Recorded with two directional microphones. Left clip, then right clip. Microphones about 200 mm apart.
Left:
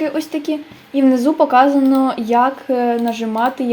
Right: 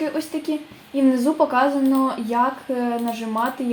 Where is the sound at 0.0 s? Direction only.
35° left (ahead or behind).